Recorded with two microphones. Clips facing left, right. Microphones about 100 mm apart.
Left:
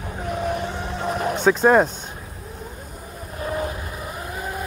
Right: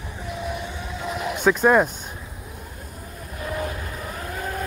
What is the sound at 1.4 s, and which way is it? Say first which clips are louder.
Speech: left 1 dB; 25° left (ahead or behind).